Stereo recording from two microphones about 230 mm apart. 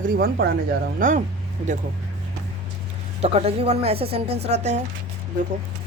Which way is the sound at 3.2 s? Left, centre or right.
Right.